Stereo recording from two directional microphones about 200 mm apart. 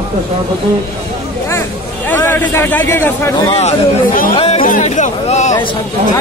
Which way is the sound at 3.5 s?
35° left (ahead or behind).